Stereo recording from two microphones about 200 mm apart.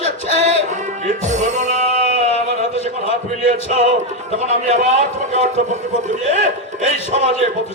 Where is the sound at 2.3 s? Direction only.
30° left (ahead or behind).